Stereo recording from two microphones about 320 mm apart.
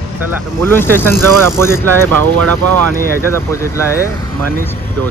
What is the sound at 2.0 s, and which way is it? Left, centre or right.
Speech, right.